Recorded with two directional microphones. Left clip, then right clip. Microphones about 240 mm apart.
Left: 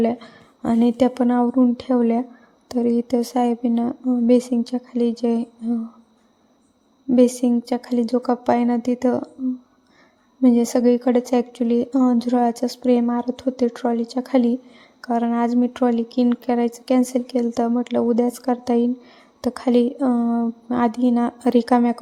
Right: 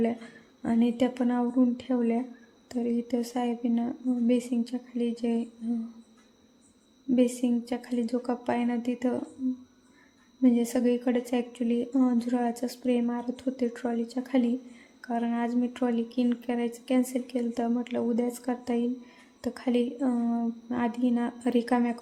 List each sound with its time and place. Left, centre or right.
0.0 s a woman's voice: left
7.1 s a woman's voice: left
10.4 s a woman's voice: left